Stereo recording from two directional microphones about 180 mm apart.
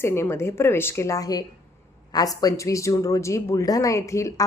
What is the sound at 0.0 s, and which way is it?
A woman's voice, 15° left (ahead or behind).